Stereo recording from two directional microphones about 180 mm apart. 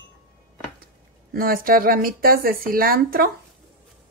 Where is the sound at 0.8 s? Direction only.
55° right (ahead or behind).